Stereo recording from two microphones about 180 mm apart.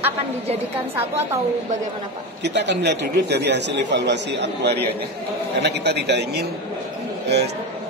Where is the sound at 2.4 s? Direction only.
75° right (ahead or behind).